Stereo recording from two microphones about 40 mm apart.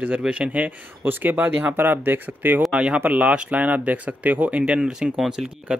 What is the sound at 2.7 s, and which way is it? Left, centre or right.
Speech, right.